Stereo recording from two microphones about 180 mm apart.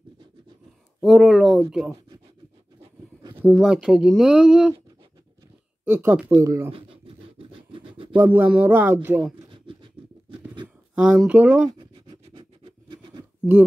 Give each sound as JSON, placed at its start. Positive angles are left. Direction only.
{"t": 1.0, "sound": "speech", "side_deg": 0}
{"t": 2.8, "sound": "a sound", "side_deg": -25}
{"t": 3.3, "sound": "speech", "side_deg": -5}
{"t": 5.9, "sound": "speech", "side_deg": -10}
{"t": 6.7, "sound": "scratch", "side_deg": -30}
{"t": 8.2, "sound": "speech", "side_deg": -10}
{"t": 9.2, "sound": "a sound", "side_deg": -30}
{"t": 11.0, "sound": "speech", "side_deg": -5}
{"t": 11.8, "sound": "scratch", "side_deg": -25}